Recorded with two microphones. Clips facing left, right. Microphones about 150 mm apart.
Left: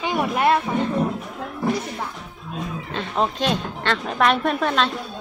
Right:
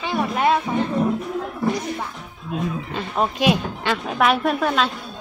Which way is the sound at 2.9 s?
5° right (ahead or behind).